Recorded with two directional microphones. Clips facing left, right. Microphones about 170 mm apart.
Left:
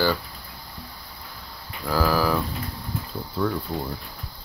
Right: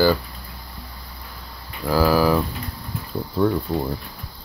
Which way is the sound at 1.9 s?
15° right (ahead or behind).